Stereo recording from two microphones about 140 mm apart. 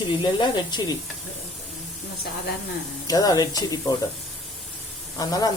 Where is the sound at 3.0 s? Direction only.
25° left (ahead or behind).